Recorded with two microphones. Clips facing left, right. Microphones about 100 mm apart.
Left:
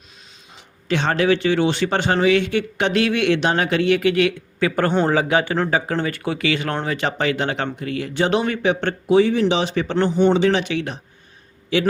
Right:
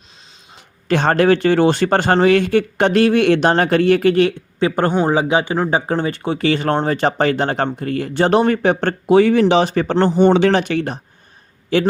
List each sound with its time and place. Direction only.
0.9 s speech: 50° right (ahead or behind)
4.7 s speech: 25° right (ahead or behind); by 9.1 s 40° right (ahead or behind)
9.1 s speech: 55° right (ahead or behind)
10.3 s speech: 55° right (ahead or behind)